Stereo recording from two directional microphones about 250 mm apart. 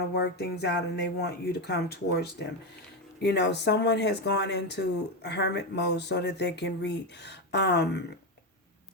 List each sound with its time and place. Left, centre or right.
0.1 s speech: left